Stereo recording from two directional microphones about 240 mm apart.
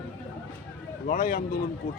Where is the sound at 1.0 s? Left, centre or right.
Left.